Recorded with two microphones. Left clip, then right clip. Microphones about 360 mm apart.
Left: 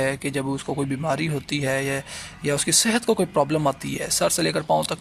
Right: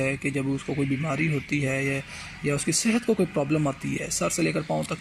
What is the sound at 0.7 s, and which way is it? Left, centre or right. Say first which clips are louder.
Speech: left 3 dB; left.